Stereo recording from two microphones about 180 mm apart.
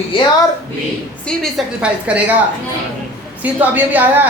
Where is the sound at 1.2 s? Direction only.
5° left (ahead or behind).